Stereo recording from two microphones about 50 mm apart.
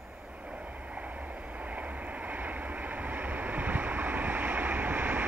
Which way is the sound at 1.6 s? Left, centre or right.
Right.